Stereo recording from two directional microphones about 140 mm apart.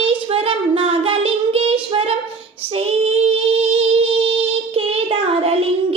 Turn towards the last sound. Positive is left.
turn(degrees=-45)  # may be behind; listen again after turning